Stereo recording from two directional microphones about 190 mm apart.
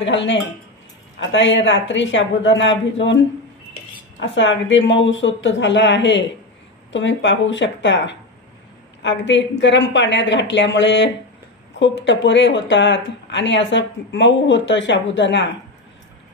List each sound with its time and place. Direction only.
0.0 s speech: 70° left (ahead or behind)
4.2 s speech: 75° left (ahead or behind)